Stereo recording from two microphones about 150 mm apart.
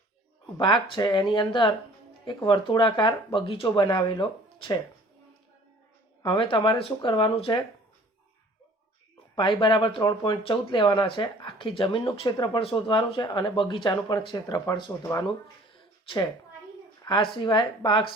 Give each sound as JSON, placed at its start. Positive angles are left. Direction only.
{"t": 0.6, "sound": "speech", "side_deg": 30}
{"t": 6.2, "sound": "speech", "side_deg": 35}
{"t": 9.3, "sound": "speech", "side_deg": 35}
{"t": 15.7, "sound": "a sound", "side_deg": 35}
{"t": 17.0, "sound": "speech", "side_deg": 30}